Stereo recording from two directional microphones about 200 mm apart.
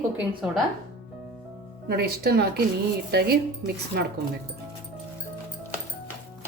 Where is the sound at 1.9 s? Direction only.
50° right (ahead or behind).